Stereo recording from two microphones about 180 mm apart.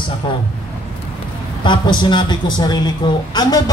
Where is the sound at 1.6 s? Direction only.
25° left (ahead or behind).